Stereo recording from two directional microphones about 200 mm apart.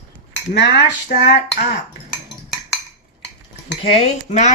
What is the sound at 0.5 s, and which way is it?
Cutlery, 55° left (ahead or behind).